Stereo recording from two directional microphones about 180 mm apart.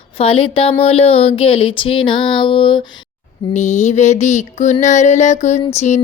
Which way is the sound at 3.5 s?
40° left (ahead or behind).